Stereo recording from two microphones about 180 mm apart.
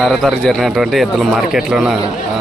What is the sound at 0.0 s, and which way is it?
Speech, centre (ahead or behind).